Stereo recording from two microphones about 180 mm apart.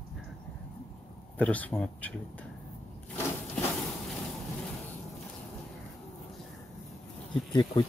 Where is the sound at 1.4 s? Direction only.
10° left (ahead or behind).